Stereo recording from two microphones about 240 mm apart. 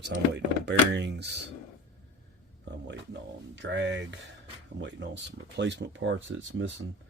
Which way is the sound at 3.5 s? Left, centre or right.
Right.